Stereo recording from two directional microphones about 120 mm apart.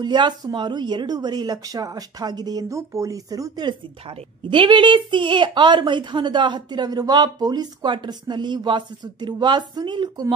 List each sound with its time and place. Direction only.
0.0 s a woman's voice: 40° right (ahead or behind)
4.5 s a woman's voice: 40° right (ahead or behind)